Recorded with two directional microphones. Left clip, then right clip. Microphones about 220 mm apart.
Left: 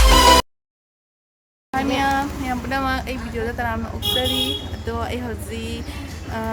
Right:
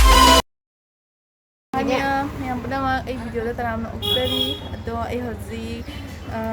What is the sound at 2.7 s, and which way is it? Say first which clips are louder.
Speech: right 1 dB; 5° right (ahead or behind).